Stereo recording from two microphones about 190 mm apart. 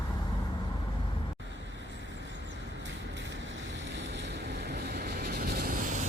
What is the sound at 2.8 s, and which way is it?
Vehicle, 70° right (ahead or behind).